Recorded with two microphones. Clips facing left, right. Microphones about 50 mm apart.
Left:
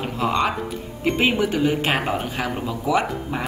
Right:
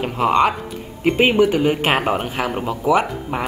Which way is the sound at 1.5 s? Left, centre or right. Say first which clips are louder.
Right 3 dB; right.